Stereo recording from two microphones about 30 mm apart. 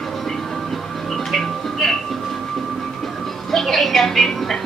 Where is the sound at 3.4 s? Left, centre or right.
Centre.